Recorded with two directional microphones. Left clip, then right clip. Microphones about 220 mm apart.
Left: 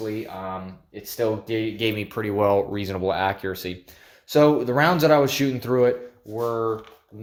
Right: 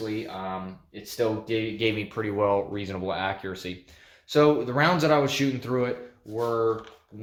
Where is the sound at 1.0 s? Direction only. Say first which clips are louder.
Left 2 dB; 35° left (ahead or behind).